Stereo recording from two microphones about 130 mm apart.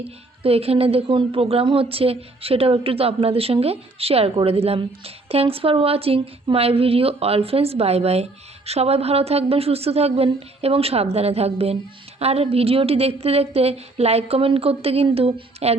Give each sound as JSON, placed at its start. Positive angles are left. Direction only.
{"t": 0.4, "sound": "a woman's voice", "side_deg": -50}